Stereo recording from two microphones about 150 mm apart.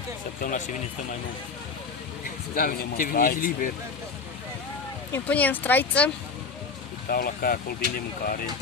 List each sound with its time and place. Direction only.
0.4 s speech: 60° left (ahead or behind)
2.5 s speech: 75° left (ahead or behind)
5.1 s speech: 10° left (ahead or behind)
7.1 s speech: 80° left